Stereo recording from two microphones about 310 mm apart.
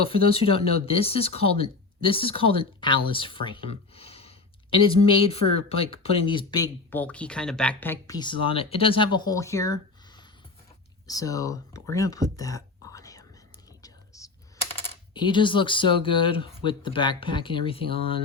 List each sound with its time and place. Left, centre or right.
0.0 s speech: centre
11.0 s speech: centre
13.8 s whispering: centre
15.1 s speech: centre